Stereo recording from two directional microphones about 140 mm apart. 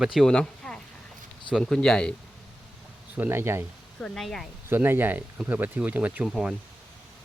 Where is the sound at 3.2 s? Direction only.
15° right (ahead or behind).